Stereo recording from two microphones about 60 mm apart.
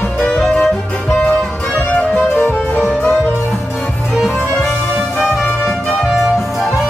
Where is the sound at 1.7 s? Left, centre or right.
Left.